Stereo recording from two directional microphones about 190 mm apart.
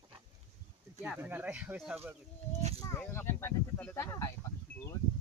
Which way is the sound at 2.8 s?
15° left (ahead or behind).